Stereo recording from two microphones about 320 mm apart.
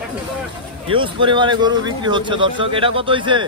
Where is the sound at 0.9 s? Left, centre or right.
Centre.